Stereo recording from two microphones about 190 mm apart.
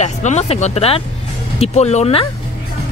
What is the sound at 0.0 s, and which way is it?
Speech, 40° left (ahead or behind).